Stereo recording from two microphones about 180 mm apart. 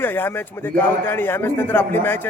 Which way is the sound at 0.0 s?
10° left (ahead or behind).